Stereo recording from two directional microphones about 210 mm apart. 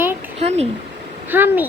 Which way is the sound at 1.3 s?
10° right (ahead or behind).